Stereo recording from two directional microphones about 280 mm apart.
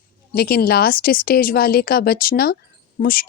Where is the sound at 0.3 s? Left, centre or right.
Left.